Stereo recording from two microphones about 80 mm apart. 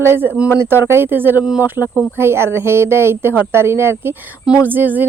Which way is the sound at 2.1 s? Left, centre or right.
Right.